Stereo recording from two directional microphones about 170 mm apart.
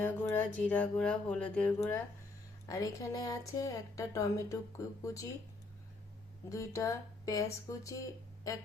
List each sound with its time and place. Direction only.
0.0 s music: 10° left (ahead or behind)
2.6 s speech: 20° left (ahead or behind)
6.5 s speech: 20° left (ahead or behind)